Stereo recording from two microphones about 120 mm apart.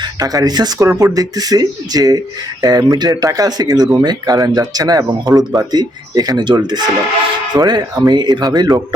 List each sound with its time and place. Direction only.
0.0 s speech: 30° right (ahead or behind)